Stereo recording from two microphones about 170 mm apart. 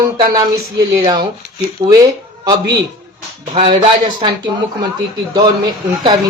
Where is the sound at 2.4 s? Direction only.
25° right (ahead or behind).